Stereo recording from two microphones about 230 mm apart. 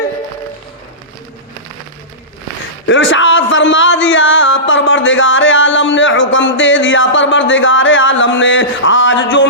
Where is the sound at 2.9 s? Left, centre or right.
Left.